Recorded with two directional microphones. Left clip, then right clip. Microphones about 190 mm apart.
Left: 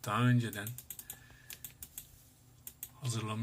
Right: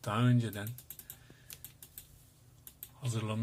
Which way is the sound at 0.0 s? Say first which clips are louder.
Even; 45° right (ahead or behind).